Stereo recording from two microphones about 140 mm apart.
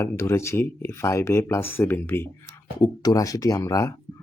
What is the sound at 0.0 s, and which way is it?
Speech, 20° left (ahead or behind).